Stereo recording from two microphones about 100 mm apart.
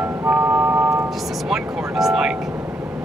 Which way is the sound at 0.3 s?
10° right (ahead or behind).